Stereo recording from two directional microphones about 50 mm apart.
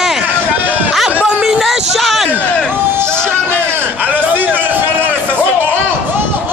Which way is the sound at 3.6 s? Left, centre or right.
Right.